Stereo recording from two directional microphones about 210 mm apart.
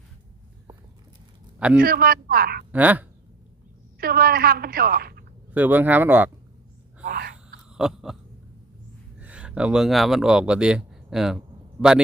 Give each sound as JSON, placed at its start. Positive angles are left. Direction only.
{"t": 1.5, "sound": "a man's voice", "side_deg": -5}
{"t": 1.8, "sound": "a woman's voice", "side_deg": -45}
{"t": 2.7, "sound": "speech", "side_deg": -10}
{"t": 3.9, "sound": "a woman's voice", "side_deg": -45}
{"t": 5.5, "sound": "speech", "side_deg": -10}
{"t": 7.0, "sound": "a sound", "side_deg": -45}
{"t": 7.7, "sound": "a sound", "side_deg": -5}
{"t": 9.2, "sound": "a man's voice", "side_deg": -5}